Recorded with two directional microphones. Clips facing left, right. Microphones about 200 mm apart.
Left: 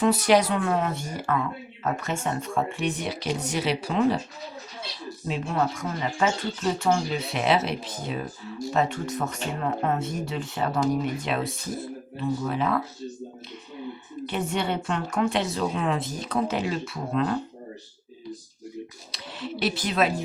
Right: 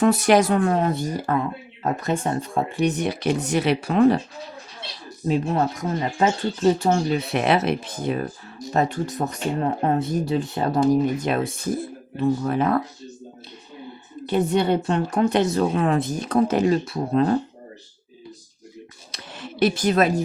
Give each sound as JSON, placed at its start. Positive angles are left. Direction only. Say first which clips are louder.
{"t": 0.0, "sound": "speech", "louder": "right 3 dB", "side_deg": -50}
{"t": 5.3, "sound": "speech", "louder": "right 5 dB", "side_deg": -40}
{"t": 7.1, "sound": "speech", "louder": "right 4 dB", "side_deg": -55}
{"t": 8.7, "sound": "speech", "louder": "right 3 dB", "side_deg": -40}
{"t": 11.2, "sound": "speech", "louder": "right 5 dB", "side_deg": -45}
{"t": 14.3, "sound": "speech", "louder": "right 8 dB", "side_deg": -35}
{"t": 19.1, "sound": "speech", "louder": "left 3 dB", "side_deg": -50}